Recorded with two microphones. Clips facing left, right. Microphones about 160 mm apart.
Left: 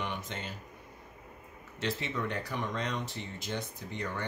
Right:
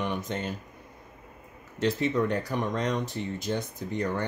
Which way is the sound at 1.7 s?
45° right (ahead or behind).